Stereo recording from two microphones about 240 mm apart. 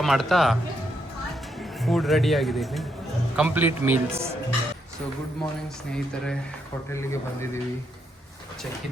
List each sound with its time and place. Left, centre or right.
0.0 s speech: centre
1.8 s a man's voice: centre
6.9 s speech: centre